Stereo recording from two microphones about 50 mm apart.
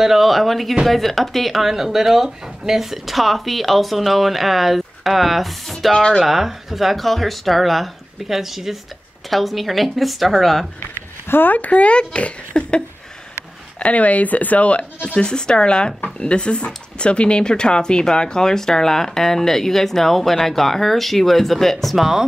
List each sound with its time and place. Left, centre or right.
0.0 s speech: centre
11.2 s speech: left; by 22.2 s centre